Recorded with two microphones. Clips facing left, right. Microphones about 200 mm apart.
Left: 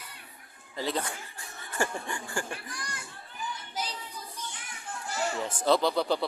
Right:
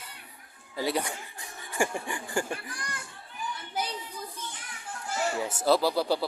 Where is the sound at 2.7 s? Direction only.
55° right (ahead or behind).